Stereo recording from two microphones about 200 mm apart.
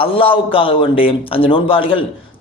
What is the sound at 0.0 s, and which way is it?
A man's voice, 25° left (ahead or behind).